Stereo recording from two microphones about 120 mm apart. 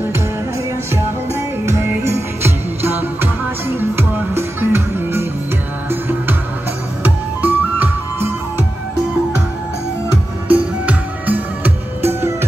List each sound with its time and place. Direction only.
0.9 s music: 20° right (ahead or behind)
10.5 s music: 15° right (ahead or behind)